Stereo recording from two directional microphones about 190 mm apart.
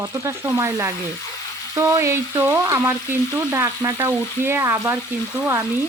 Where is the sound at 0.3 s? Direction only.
15° right (ahead or behind).